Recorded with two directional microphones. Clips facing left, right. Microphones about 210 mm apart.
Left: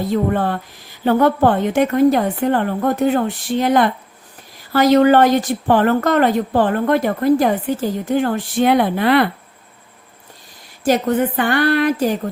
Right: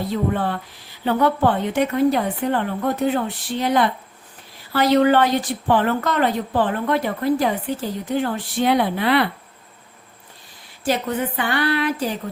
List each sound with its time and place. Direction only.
0.1 s a woman's voice: 45° left (ahead or behind)
10.8 s a woman's voice: 45° left (ahead or behind)